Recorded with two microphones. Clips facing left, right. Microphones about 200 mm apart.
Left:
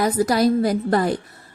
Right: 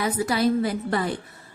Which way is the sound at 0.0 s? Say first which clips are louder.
Left 5 dB; 40° left (ahead or behind).